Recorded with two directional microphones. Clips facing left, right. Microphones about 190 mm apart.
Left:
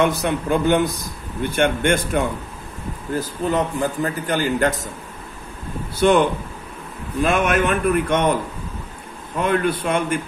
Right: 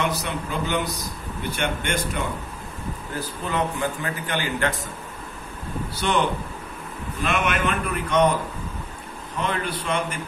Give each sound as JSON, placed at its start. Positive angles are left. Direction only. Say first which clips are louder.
{"t": 0.0, "sound": "a man's voice", "louder": "left 7 dB", "side_deg": 55}
{"t": 3.2, "sound": "a man's voice", "louder": "left 5 dB", "side_deg": 40}
{"t": 5.9, "sound": "a man's voice", "louder": "left 8 dB", "side_deg": 50}
{"t": 7.4, "sound": "a man's voice", "louder": "left 6 dB", "side_deg": 45}
{"t": 9.4, "sound": "a man's voice", "louder": "left 8 dB", "side_deg": 50}